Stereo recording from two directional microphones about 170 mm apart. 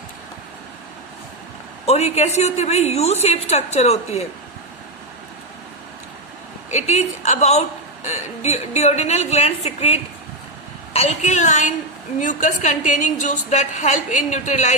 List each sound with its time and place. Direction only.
1.9 s a woman's voice: 40° left (ahead or behind)
6.7 s a woman's voice: 40° left (ahead or behind)